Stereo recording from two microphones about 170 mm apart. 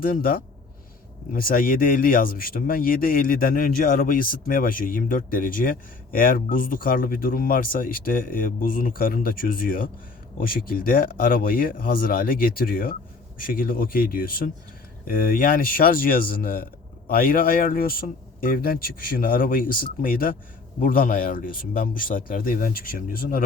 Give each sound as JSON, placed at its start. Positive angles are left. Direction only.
{"t": 0.0, "sound": "speech", "side_deg": 55}